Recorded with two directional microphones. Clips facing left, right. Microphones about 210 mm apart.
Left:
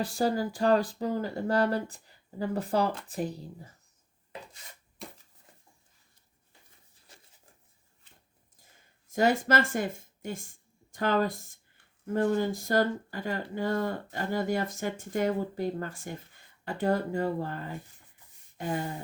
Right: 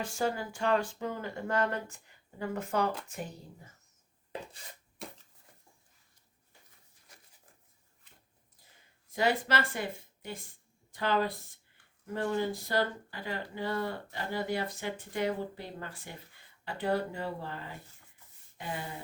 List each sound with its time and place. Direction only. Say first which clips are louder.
0.0 s speech: left 5 dB; 35° left (ahead or behind)
9.0 s speech: left 4 dB; 45° left (ahead or behind)
18.5 s a sound: left 7 dB; 45° left (ahead or behind)